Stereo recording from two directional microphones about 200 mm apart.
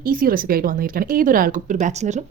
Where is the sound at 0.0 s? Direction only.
45° right (ahead or behind).